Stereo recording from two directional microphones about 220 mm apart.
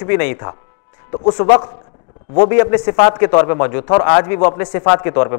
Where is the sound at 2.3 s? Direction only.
10° left (ahead or behind).